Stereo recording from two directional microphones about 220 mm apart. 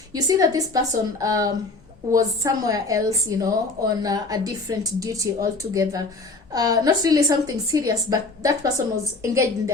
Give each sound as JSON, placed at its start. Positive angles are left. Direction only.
{"t": 0.1, "sound": "a woman's voice", "side_deg": -15}